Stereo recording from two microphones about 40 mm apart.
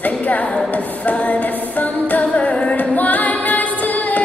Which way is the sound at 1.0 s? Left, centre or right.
Left.